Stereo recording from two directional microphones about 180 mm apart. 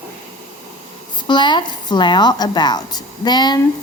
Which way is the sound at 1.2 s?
25° left (ahead or behind).